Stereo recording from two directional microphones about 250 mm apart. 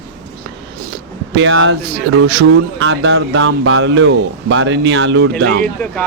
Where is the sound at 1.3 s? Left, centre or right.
Right.